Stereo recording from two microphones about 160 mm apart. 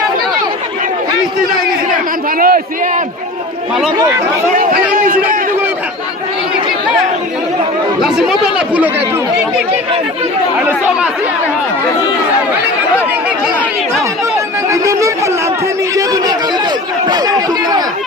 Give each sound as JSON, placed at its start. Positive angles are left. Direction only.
{"t": 2.4, "sound": "a man's voice", "side_deg": -60}
{"t": 4.9, "sound": "a man's voice", "side_deg": -60}
{"t": 8.0, "sound": "speech", "side_deg": -5}
{"t": 10.6, "sound": "speech", "side_deg": -10}
{"t": 14.7, "sound": "a sound", "side_deg": -20}
{"t": 16.0, "sound": "speech", "side_deg": -25}